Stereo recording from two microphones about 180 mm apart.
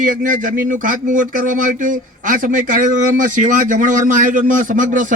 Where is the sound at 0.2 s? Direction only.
45° right (ahead or behind).